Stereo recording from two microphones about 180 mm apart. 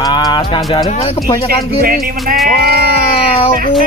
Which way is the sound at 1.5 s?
55° right (ahead or behind).